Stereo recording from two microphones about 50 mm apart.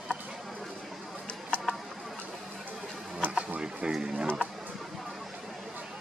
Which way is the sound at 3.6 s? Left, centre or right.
Centre.